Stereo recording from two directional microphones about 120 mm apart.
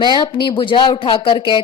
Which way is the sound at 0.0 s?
40° left (ahead or behind).